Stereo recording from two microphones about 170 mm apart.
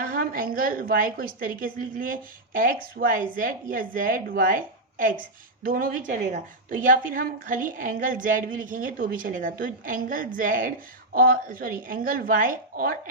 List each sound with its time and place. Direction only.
0.0 s a woman's voice: 55° right (ahead or behind)